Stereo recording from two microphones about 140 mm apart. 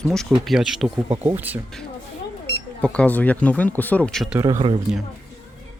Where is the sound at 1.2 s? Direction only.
10° right (ahead or behind).